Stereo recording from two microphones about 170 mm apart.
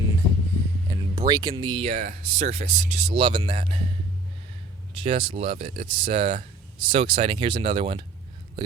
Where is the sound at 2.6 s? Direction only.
45° right (ahead or behind).